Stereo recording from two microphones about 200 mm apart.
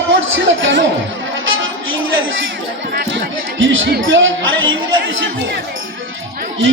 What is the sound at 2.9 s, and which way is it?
Speech, 65° right (ahead or behind).